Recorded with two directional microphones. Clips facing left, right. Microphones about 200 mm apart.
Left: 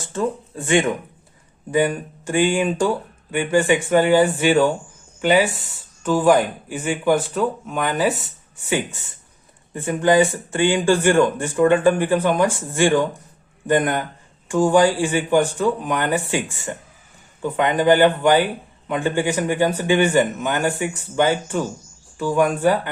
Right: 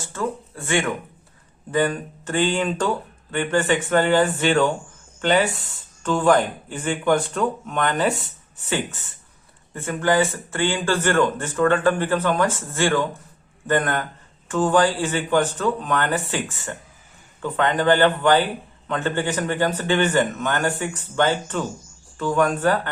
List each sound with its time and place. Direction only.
0.0 s speech: 20° left (ahead or behind)